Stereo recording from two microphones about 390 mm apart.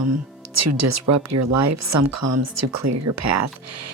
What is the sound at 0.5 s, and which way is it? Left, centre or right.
Speech, right.